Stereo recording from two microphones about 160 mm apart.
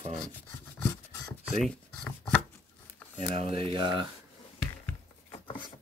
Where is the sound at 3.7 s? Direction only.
30° right (ahead or behind).